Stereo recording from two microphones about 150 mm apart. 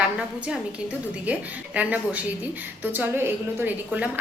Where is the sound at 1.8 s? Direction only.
10° right (ahead or behind).